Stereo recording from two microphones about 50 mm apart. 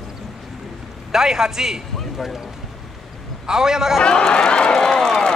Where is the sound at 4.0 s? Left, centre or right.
Centre.